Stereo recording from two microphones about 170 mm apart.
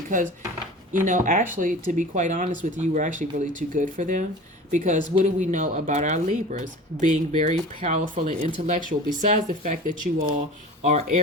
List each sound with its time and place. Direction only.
0.9 s speech: 50° right (ahead or behind)
8.4 s speech: 40° right (ahead or behind)